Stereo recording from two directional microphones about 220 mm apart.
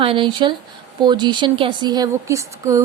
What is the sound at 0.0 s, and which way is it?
A woman's voice, 25° right (ahead or behind).